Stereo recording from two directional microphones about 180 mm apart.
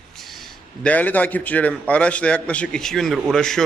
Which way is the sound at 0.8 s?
10° left (ahead or behind).